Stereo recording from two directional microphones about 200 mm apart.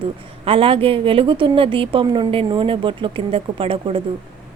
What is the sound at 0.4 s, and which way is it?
A woman's voice, 25° right (ahead or behind).